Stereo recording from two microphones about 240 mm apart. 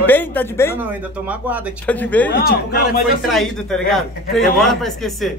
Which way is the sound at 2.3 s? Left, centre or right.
Left.